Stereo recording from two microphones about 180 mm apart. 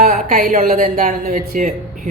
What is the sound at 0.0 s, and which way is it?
Speech, 45° right (ahead or behind).